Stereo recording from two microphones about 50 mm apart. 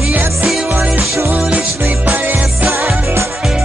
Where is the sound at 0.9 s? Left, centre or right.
Centre.